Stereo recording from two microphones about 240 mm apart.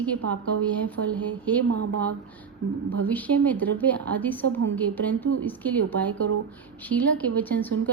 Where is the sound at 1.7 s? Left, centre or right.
Right.